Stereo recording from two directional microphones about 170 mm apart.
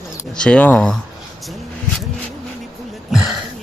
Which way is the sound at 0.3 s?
5° left (ahead or behind).